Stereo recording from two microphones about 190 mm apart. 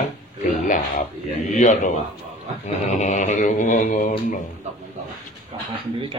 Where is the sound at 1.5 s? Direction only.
40° left (ahead or behind).